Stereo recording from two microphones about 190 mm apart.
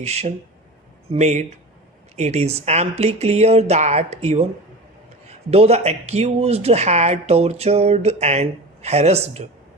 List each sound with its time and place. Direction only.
0.0 s speech: 35° right (ahead or behind)
5.5 s speech: 35° right (ahead or behind)